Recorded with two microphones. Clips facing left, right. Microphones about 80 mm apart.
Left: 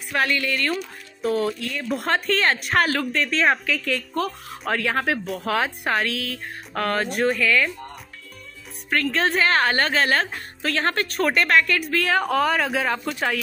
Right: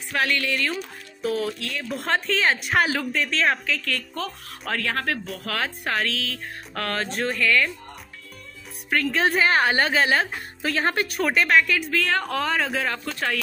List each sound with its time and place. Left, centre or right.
0.1 s speech: centre
8.9 s a woman's voice: centre
11.2 s speech: centre